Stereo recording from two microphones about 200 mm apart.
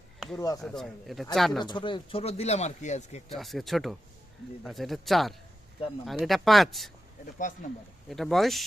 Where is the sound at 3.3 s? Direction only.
Centre (ahead or behind).